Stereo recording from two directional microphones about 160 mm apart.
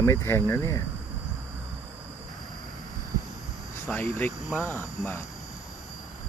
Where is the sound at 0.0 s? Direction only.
15° left (ahead or behind).